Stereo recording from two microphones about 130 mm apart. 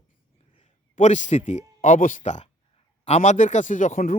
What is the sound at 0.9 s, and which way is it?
Speech, 70° left (ahead or behind).